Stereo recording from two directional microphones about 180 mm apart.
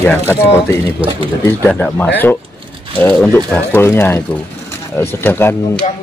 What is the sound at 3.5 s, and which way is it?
Speech, 10° left (ahead or behind).